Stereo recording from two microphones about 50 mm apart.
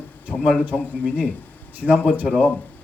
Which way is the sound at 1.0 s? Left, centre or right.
Left.